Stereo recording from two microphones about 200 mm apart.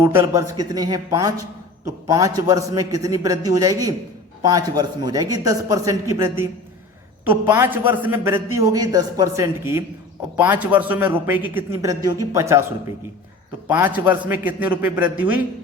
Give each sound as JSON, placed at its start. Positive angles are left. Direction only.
{"t": 0.0, "sound": "a man's voice", "side_deg": -10}
{"t": 13.7, "sound": "a man's voice", "side_deg": -10}